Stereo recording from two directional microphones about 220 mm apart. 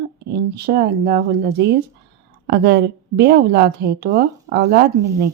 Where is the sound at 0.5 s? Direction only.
45° right (ahead or behind).